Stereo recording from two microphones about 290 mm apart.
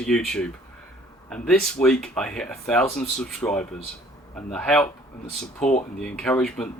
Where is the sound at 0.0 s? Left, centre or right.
Centre.